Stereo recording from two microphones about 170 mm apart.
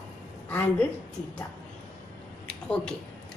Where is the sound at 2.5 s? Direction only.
5° left (ahead or behind).